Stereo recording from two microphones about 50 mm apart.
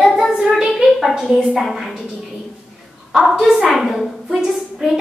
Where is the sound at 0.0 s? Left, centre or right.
Centre.